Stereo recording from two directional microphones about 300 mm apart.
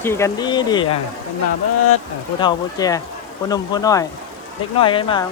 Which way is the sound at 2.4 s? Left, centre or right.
Centre.